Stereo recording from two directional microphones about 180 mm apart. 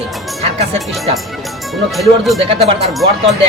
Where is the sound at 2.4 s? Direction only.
35° right (ahead or behind).